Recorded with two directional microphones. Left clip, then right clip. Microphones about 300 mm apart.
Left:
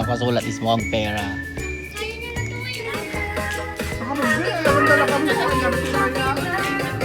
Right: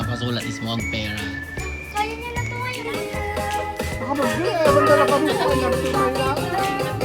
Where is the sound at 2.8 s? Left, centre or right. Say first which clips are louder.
Even; centre.